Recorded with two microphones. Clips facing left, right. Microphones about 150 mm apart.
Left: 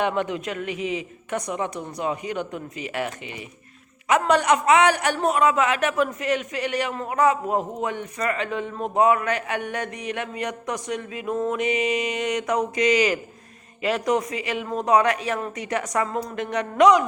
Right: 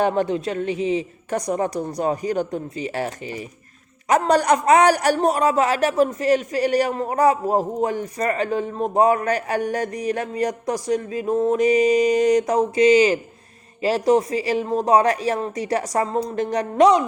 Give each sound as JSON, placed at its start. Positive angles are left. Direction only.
{"t": 0.0, "sound": "a man's voice", "side_deg": -35}